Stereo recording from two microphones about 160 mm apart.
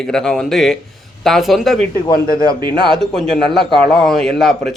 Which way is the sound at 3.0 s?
Centre (ahead or behind).